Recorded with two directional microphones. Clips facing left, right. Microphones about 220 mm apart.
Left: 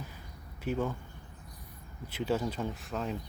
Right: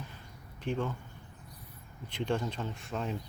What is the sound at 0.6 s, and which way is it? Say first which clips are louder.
Speech: left 1 dB; 10° left (ahead or behind).